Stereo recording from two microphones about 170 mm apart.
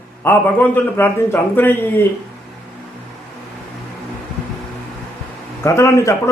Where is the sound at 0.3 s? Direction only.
10° left (ahead or behind).